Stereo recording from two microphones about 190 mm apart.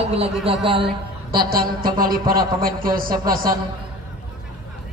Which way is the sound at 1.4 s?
50° right (ahead or behind).